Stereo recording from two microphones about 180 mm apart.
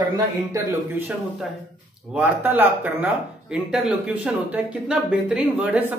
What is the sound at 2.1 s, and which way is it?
Speech, 10° right (ahead or behind).